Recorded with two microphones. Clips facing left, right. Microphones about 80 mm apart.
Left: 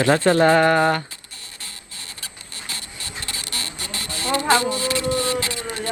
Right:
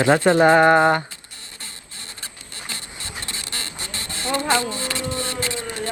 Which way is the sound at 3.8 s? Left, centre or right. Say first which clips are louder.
Left 2 dB; left.